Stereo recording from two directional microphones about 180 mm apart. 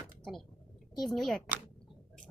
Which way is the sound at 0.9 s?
Centre (ahead or behind).